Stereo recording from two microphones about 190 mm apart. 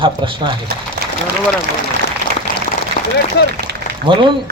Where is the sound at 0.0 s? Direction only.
25° right (ahead or behind).